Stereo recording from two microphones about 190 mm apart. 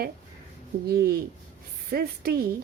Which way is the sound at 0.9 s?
50° right (ahead or behind).